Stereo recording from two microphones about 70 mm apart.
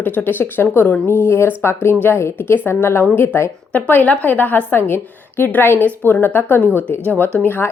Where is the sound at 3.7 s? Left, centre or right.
Left.